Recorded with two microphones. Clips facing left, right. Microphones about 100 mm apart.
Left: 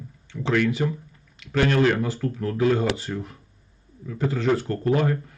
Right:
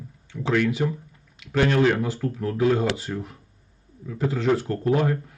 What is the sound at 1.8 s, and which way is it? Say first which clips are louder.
Speech: even; 5° right (ahead or behind).